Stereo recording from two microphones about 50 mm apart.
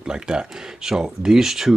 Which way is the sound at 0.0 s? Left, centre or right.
Centre.